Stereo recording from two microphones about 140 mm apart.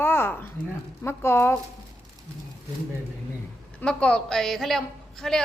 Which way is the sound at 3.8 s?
10° left (ahead or behind).